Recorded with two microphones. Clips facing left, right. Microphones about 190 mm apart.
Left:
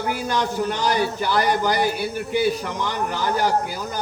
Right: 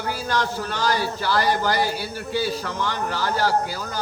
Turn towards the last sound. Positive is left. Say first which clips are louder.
# left 1 dB
turn(degrees=15)  # may be behind; listen again after turning